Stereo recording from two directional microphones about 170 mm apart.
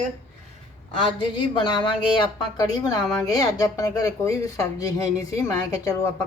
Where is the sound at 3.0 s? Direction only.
5° left (ahead or behind).